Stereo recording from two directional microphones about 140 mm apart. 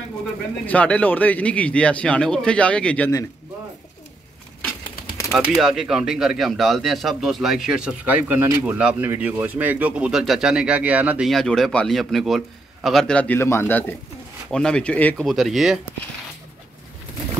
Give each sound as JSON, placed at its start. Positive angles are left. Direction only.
{"t": 0.7, "sound": "speech", "side_deg": 10}
{"t": 5.5, "sound": "speech", "side_deg": -5}
{"t": 11.2, "sound": "speech", "side_deg": 0}
{"t": 15.2, "sound": "speech", "side_deg": 0}